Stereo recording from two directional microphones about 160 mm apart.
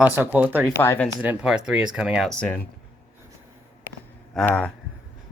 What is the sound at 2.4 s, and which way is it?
Speech, 10° left (ahead or behind).